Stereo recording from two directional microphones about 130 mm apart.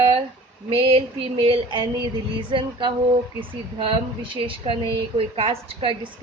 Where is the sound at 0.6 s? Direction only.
40° right (ahead or behind).